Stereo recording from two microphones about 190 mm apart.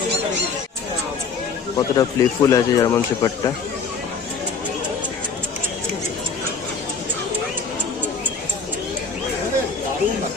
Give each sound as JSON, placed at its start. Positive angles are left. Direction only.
{"t": 1.8, "sound": "speech", "side_deg": 20}